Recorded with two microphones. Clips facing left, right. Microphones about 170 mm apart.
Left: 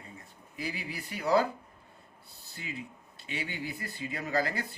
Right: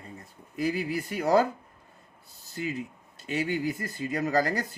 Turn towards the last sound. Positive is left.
turn(degrees=-40)  # may be behind; listen again after turning